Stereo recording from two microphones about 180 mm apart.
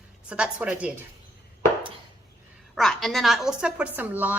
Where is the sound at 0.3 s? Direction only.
5° right (ahead or behind).